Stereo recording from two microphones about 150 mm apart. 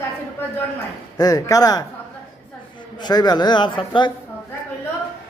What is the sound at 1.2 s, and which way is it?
Speech, 25° left (ahead or behind).